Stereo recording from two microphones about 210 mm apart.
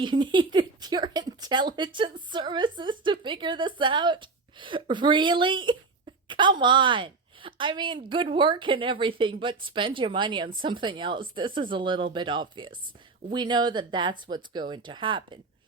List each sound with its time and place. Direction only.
0.0 s speech: 20° right (ahead or behind)